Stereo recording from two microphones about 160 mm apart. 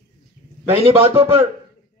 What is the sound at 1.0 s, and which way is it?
Speech, 15° right (ahead or behind).